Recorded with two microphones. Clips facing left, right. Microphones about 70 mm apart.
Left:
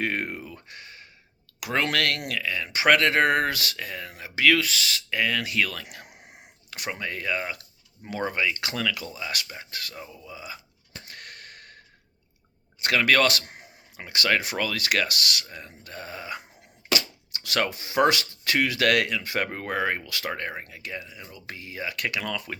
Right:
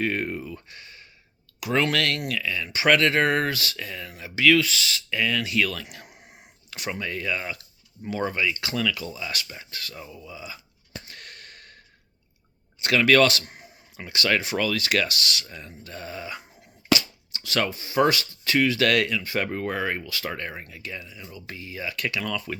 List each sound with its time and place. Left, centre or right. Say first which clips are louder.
0.0 s speech: right 2 dB; left
2.4 s speech: left 2 dB; left
9.9 s speech: right 1 dB; left
11.0 s a sound: left 1 dB; left
12.8 s speech: right 3 dB; left
13.5 s a sound: even; left
14.0 s speech: even; left
15.4 s speech: right 1 dB; left
17.0 s speech: left 1 dB; left